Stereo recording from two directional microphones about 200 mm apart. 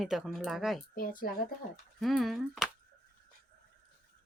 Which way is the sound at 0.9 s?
45° left (ahead or behind).